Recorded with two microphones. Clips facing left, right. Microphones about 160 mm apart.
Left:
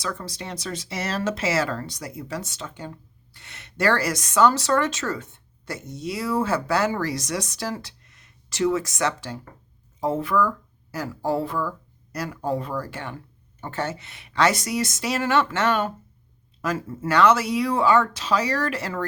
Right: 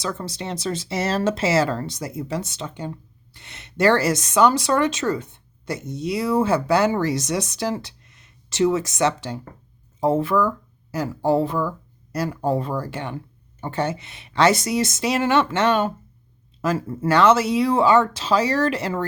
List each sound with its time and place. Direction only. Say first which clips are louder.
0.0 s speech: right 3 dB; 25° right (ahead or behind)